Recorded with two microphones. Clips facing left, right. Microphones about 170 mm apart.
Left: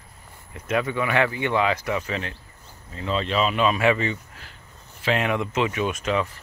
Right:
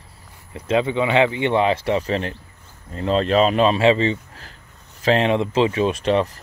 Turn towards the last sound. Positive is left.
turn(degrees=-35)  # may be behind; listen again after turning